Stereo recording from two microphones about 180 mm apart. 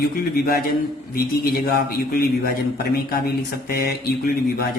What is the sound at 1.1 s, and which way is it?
Speech, 55° left (ahead or behind).